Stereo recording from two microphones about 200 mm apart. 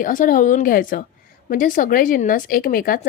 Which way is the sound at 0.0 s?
45° left (ahead or behind).